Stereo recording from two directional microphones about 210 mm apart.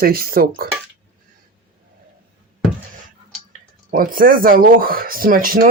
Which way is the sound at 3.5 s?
40° right (ahead or behind).